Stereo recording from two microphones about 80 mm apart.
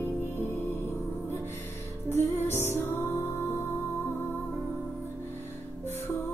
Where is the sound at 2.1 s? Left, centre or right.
Left.